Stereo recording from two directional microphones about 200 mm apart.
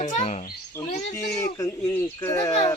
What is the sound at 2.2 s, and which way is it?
Speech, 15° left (ahead or behind).